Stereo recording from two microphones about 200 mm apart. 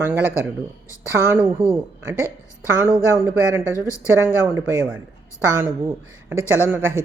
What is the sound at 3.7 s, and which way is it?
Speech, 15° left (ahead or behind).